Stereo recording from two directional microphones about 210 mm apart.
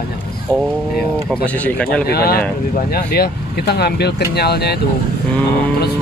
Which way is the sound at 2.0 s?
45° left (ahead or behind).